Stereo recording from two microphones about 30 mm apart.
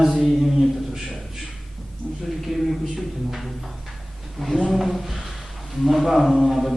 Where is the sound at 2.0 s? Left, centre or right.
Left.